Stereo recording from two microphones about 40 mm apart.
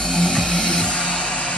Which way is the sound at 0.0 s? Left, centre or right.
Centre.